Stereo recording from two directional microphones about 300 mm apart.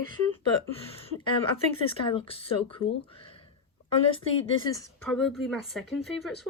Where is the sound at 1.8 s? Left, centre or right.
Centre.